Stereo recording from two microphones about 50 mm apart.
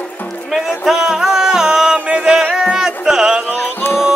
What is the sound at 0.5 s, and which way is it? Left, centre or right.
Music, centre.